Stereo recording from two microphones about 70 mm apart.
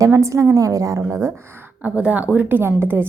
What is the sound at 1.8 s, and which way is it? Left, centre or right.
A woman's voice, right.